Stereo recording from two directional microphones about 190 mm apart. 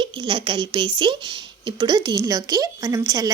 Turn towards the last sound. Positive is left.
turn(degrees=-20)  # may be behind; listen again after turning